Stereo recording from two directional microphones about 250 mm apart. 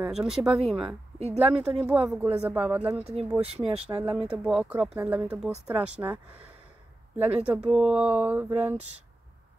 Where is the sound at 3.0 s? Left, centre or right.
Right.